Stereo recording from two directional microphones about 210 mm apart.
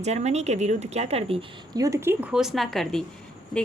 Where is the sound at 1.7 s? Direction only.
15° right (ahead or behind); by 3.1 s centre (ahead or behind).